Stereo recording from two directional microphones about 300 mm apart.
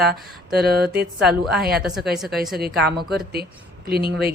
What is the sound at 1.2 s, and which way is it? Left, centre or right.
Speech, centre.